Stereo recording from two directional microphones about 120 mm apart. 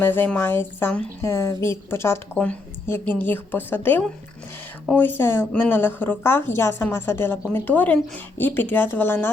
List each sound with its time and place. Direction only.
0.0 s speech: 15° left (ahead or behind)